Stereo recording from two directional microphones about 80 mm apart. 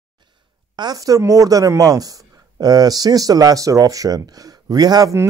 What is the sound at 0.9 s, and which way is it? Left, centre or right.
Speech, right.